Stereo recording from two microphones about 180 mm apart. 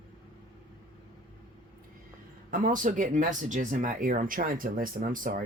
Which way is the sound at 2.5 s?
50° right (ahead or behind).